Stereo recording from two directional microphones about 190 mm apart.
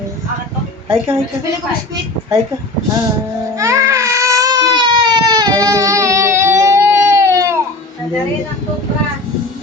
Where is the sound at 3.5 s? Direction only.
15° right (ahead or behind).